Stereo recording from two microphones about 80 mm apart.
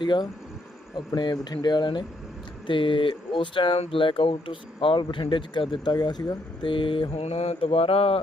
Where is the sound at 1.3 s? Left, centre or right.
Left.